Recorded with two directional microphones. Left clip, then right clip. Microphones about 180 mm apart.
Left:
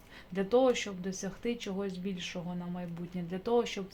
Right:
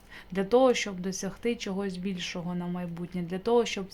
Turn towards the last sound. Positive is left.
turn(degrees=-25)  # may be behind; listen again after turning